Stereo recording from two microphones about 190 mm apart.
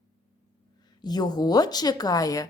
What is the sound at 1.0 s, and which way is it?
Speech, 20° left (ahead or behind).